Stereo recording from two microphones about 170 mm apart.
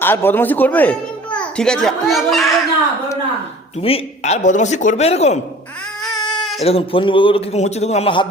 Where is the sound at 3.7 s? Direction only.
35° left (ahead or behind).